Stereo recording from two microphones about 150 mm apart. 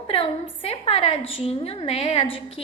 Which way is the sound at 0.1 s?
40° left (ahead or behind).